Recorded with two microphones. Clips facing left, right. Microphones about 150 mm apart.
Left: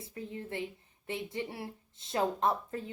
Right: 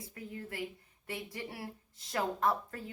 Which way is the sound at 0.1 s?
25° left (ahead or behind).